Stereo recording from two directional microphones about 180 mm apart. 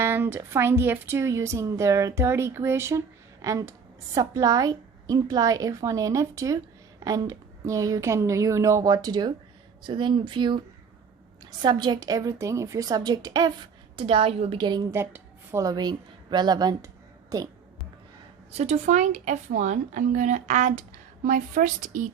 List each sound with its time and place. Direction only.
0.0 s a woman's voice: 10° right (ahead or behind)
11.6 s a woman's voice: 25° right (ahead or behind)
18.5 s speech: 40° right (ahead or behind)